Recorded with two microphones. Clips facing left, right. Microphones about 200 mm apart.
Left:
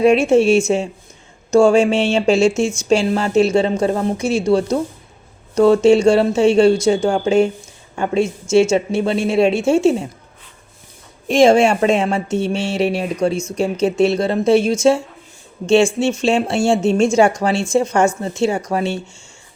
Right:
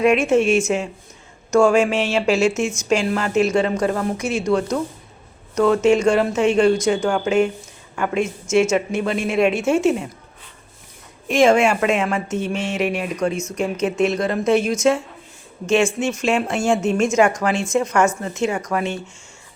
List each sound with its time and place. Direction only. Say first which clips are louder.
0.0 s a woman's voice: left 4 dB; 30° left (ahead or behind)
11.3 s a woman's voice: left 3 dB; 30° left (ahead or behind)